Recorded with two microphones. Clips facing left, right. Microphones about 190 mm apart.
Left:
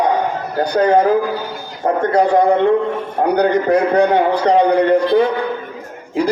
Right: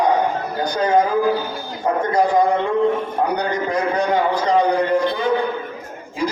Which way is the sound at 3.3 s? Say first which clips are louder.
Left 8 dB; 60° left (ahead or behind).